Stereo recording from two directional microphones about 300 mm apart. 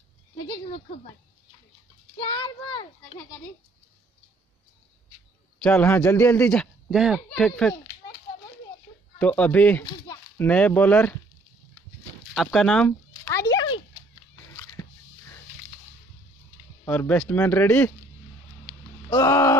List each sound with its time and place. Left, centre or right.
2.1 s speech: centre
5.6 s speech: centre
9.2 s speech: centre
12.4 s a sound: centre
14.8 s biting: centre
16.8 s speech: centre
18.7 s a sound: centre